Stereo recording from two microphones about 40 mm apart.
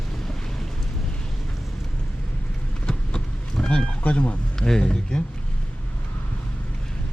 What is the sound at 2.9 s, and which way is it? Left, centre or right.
Vehicle, left.